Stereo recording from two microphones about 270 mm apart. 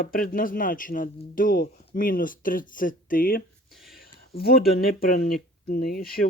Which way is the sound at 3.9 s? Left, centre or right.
Left.